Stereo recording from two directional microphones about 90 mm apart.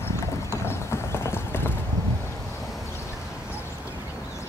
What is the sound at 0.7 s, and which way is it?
Clip-clop, 25° left (ahead or behind).